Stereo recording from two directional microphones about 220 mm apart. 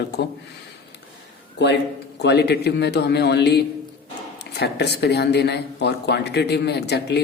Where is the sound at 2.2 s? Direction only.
50° left (ahead or behind).